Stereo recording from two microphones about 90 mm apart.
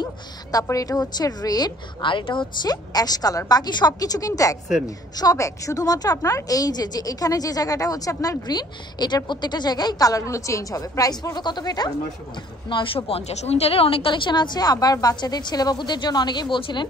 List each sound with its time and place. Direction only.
0.0 s a sound: 45° left (ahead or behind)
0.7 s a woman's voice: 40° left (ahead or behind)
2.0 s a woman's voice: 65° left (ahead or behind); by 11.9 s 50° left (ahead or behind)
12.6 s a woman's voice: 70° left (ahead or behind)